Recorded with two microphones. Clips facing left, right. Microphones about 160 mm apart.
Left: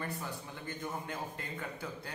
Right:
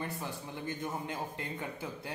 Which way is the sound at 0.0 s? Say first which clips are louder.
Right 1 dB; 20° right (ahead or behind).